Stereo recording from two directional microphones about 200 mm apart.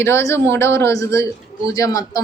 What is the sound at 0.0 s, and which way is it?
A man's voice, 15° left (ahead or behind).